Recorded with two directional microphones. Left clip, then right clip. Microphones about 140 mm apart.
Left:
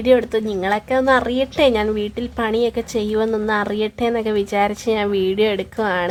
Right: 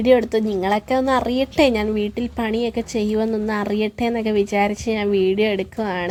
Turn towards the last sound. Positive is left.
turn(degrees=0)  # may be behind; listen again after turning